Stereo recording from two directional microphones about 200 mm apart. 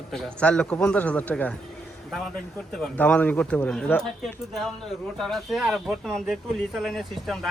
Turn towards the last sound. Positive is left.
turn(degrees=0)  # may be behind; listen again after turning